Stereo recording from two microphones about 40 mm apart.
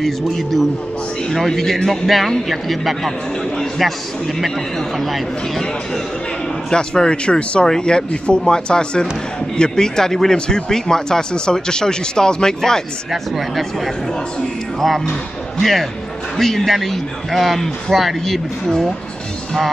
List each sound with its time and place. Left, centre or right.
0.0 s a man's voice: centre
6.7 s speech: left
14.4 s a man's voice: centre